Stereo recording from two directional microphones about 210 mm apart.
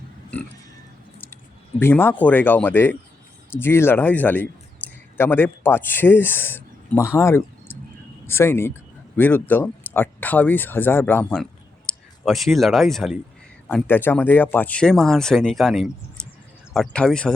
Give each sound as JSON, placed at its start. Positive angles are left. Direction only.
{"t": 1.8, "sound": "speech", "side_deg": 10}